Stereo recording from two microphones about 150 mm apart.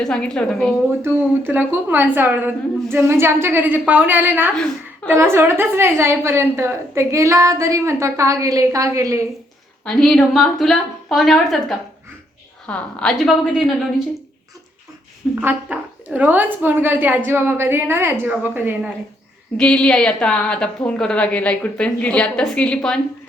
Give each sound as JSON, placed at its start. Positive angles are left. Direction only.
{"t": 0.0, "sound": "a woman's voice", "side_deg": 5}
{"t": 1.0, "sound": "a woman's voice", "side_deg": -15}
{"t": 9.8, "sound": "a woman's voice", "side_deg": 0}
{"t": 15.4, "sound": "a woman's voice", "side_deg": -10}
{"t": 19.5, "sound": "a woman's voice", "side_deg": 5}